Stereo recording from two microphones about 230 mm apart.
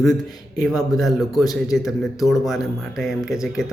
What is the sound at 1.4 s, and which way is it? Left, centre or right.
Speech, centre.